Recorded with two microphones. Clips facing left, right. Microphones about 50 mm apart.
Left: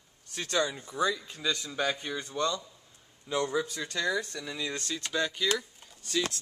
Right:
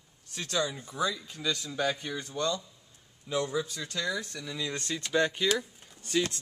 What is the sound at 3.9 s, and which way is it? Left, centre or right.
Speech, centre.